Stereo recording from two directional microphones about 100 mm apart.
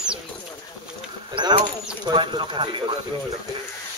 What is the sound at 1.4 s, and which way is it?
Speech, 50° right (ahead or behind).